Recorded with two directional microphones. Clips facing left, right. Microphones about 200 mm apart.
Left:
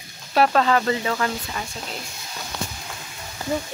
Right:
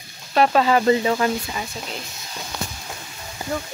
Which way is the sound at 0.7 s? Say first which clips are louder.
Right 5 dB; 20° right (ahead or behind).